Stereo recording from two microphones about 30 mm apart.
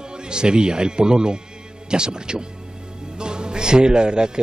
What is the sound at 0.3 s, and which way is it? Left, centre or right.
A man's voice, right.